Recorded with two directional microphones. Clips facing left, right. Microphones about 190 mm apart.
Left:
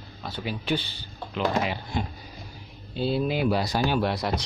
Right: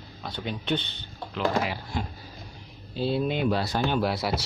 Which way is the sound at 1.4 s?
20° left (ahead or behind).